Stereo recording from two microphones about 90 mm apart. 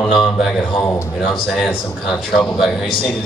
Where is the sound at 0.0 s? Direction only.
5° left (ahead or behind).